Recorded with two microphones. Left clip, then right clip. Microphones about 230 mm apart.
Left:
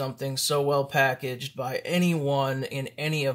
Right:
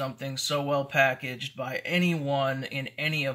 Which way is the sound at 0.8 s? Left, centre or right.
Left.